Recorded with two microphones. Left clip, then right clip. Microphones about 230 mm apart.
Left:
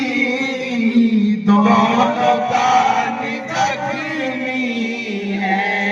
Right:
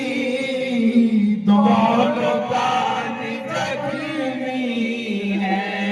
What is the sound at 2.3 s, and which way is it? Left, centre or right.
Music, left.